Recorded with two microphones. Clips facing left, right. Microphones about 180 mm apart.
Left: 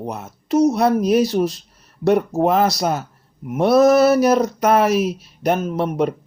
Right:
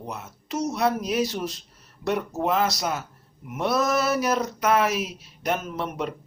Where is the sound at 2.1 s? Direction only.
50° left (ahead or behind).